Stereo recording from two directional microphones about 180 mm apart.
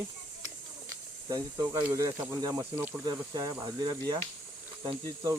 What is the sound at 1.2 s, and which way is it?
Speech, 20° right (ahead or behind).